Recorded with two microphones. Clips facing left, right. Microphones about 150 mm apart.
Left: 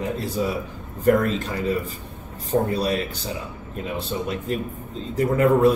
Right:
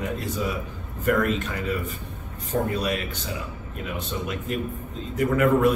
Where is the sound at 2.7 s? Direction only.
35° left (ahead or behind).